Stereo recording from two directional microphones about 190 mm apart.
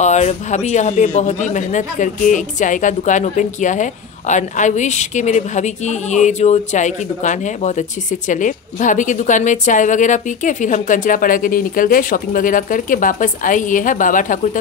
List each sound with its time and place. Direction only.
0.0 s a man's voice: 35° left (ahead or behind)